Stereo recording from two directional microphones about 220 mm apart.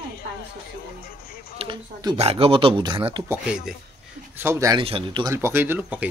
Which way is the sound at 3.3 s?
5° right (ahead or behind).